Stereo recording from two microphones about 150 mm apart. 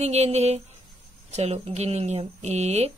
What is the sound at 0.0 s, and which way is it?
Speech, 45° right (ahead or behind).